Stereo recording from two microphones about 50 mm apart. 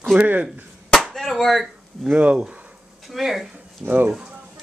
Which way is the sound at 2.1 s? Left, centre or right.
Right.